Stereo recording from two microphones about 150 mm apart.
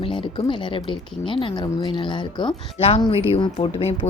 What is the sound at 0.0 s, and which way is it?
Speech, 40° left (ahead or behind).